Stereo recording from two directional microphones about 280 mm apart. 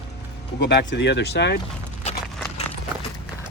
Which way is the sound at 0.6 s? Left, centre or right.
Left.